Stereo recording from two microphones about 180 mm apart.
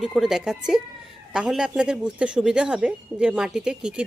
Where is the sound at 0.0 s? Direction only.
Centre (ahead or behind).